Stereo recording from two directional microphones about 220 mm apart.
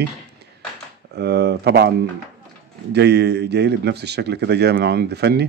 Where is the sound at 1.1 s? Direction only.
50° right (ahead or behind).